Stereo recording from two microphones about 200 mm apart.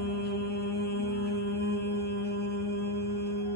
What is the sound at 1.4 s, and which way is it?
Music, 55° left (ahead or behind).